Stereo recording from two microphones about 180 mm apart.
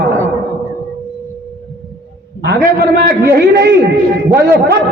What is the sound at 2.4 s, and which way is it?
Speech, 65° right (ahead or behind).